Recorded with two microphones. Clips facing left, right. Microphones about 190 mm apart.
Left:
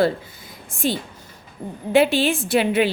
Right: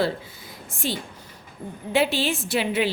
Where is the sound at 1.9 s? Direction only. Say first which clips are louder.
Left 6 dB; 55° left (ahead or behind).